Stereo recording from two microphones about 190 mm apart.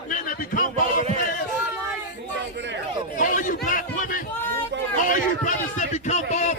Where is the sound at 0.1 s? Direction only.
45° left (ahead or behind).